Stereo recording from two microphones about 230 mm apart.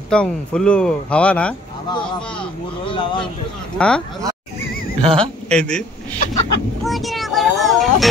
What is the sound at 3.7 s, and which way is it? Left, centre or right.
Speech, centre.